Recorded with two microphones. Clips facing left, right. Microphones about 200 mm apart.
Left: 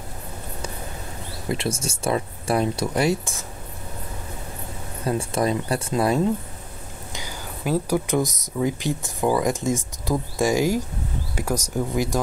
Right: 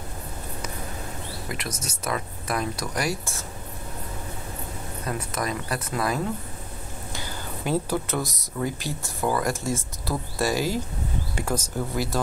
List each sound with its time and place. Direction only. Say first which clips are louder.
1.5 s speech: left 11 dB; 25° left (ahead or behind)
5.0 s speech: left 7 dB; 30° left (ahead or behind)
7.1 s whispering: even; 15° left (ahead or behind)
7.6 s speech: left 3 dB; 5° left (ahead or behind)
8.1 s speech: left 6 dB; 15° left (ahead or behind)